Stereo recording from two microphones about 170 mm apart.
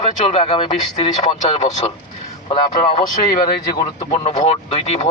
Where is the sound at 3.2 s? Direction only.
20° left (ahead or behind).